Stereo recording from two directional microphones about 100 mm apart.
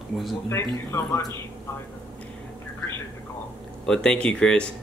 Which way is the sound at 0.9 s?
35° left (ahead or behind).